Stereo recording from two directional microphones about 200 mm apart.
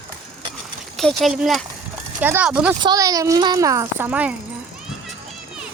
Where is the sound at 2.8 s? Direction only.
20° right (ahead or behind).